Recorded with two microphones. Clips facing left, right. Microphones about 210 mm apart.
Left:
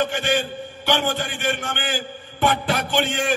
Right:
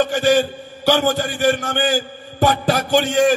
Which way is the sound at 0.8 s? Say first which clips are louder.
Right 6 dB; 40° right (ahead or behind).